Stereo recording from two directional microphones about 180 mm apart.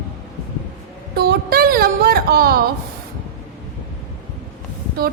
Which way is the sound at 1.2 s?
60° right (ahead or behind).